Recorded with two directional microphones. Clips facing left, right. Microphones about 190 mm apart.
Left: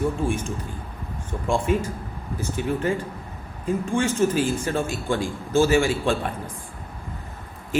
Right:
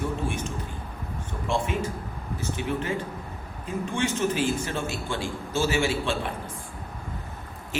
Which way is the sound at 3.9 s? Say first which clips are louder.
Left 4 dB; 45° left (ahead or behind).